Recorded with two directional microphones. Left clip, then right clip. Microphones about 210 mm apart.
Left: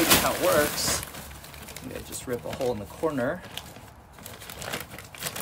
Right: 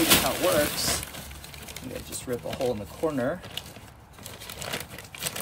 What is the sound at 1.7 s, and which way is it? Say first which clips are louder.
Speech: right 1 dB; centre (ahead or behind).